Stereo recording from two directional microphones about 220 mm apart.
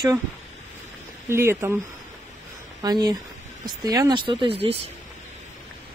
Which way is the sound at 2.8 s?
20° right (ahead or behind).